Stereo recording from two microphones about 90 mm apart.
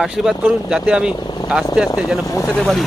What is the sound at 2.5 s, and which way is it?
Speech, 5° left (ahead or behind).